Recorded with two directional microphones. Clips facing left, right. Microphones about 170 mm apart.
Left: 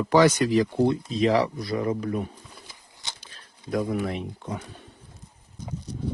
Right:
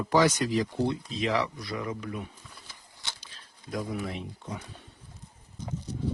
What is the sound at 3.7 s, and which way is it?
Speech, 60° left (ahead or behind).